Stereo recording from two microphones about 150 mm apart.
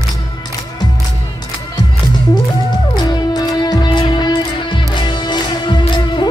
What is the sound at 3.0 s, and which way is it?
Music, 30° left (ahead or behind).